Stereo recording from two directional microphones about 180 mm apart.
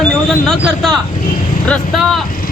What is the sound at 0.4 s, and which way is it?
Speech, centre (ahead or behind).